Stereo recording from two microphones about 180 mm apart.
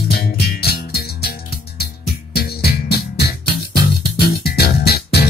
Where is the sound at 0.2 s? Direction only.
60° left (ahead or behind).